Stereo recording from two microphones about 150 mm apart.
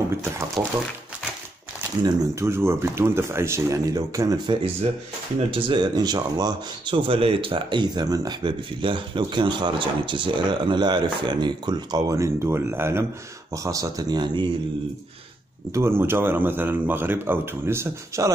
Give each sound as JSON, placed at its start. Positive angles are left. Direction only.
{"t": 0.6, "sound": "speech", "side_deg": 0}
{"t": 2.0, "sound": "speech", "side_deg": -20}
{"t": 5.5, "sound": "speech", "side_deg": -35}
{"t": 15.7, "sound": "speech", "side_deg": -15}